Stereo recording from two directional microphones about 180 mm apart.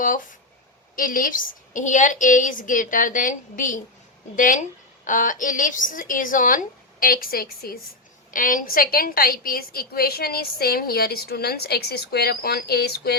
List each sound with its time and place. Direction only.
0.9 s a woman's voice: 50° left (ahead or behind)